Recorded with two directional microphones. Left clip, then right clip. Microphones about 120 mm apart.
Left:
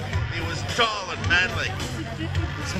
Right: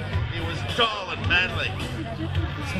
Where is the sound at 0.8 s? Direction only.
10° right (ahead or behind).